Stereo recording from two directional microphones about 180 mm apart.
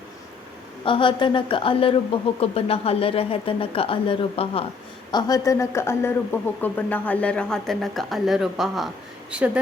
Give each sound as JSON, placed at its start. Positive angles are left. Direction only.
{"t": 0.9, "sound": "a woman's voice", "side_deg": 30}
{"t": 5.1, "sound": "speech", "side_deg": 20}